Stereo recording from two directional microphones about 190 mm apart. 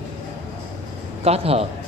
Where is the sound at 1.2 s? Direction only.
30° right (ahead or behind).